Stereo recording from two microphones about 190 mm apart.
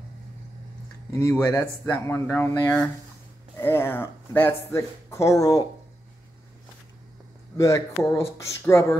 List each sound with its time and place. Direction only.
1.1 s speech: 15° left (ahead or behind)
7.5 s speech: 15° left (ahead or behind)